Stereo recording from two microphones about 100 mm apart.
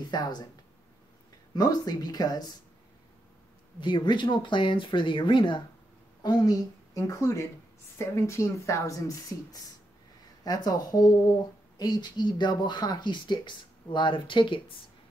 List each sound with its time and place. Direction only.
0.0 s speech: 45° left (ahead or behind)
1.5 s speech: 45° left (ahead or behind)
3.8 s speech: 50° left (ahead or behind)
6.3 s speech: 40° left (ahead or behind); by 14.8 s 55° left (ahead or behind)